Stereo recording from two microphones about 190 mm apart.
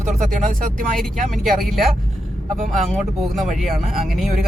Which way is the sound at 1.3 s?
Centre (ahead or behind).